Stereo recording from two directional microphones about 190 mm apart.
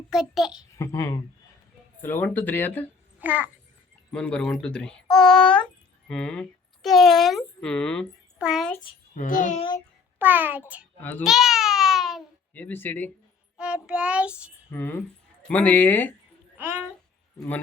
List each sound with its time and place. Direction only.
0.1 s child singing: 5° right (ahead or behind)
0.8 s speech: 15° left (ahead or behind)
3.2 s a child's voice: 10° right (ahead or behind)
4.1 s speech: 5° left (ahead or behind)
9.1 s a child's voice: 45° left (ahead or behind)
10.2 s a child's voice: 10° right (ahead or behind); by 13.1 s 10° left (ahead or behind)
13.6 s child singing: 5° right (ahead or behind)
14.7 s speech: 10° left (ahead or behind)